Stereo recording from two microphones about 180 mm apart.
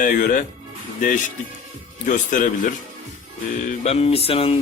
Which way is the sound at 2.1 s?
45° left (ahead or behind).